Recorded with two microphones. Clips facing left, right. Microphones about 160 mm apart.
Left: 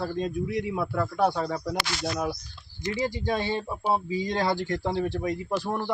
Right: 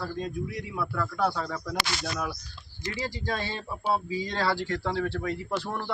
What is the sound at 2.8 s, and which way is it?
Speech, 20° left (ahead or behind).